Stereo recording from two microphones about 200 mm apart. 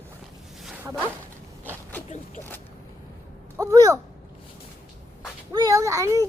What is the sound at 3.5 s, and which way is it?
Speech, 15° right (ahead or behind).